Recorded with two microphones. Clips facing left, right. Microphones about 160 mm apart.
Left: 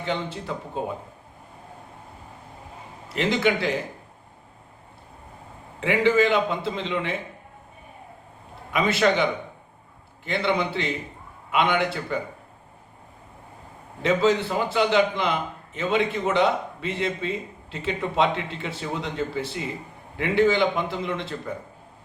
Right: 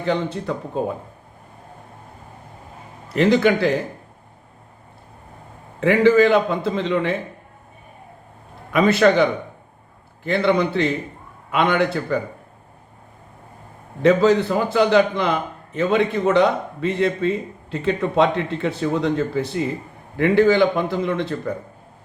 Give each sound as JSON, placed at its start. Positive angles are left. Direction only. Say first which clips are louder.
{"t": 0.0, "sound": "a man's voice", "louder": "right 6 dB", "side_deg": -50}
{"t": 3.1, "sound": "a man's voice", "louder": "right 7 dB", "side_deg": -50}
{"t": 5.8, "sound": "a man's voice", "louder": "right 6 dB", "side_deg": -45}
{"t": 8.7, "sound": "a man's voice", "louder": "right 6 dB", "side_deg": -50}
{"t": 14.0, "sound": "a man's voice", "louder": "right 6 dB", "side_deg": -45}